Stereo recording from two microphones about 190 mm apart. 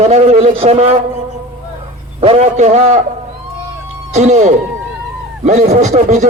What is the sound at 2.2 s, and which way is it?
Speech, 35° right (ahead or behind).